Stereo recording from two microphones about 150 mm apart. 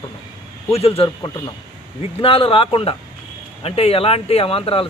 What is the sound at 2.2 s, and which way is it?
Speech, 35° left (ahead or behind).